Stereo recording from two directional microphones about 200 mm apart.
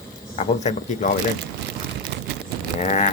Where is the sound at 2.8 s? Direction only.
40° left (ahead or behind).